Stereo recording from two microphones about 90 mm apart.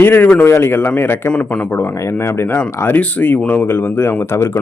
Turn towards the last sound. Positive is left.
turn(degrees=25)  # may be behind; listen again after turning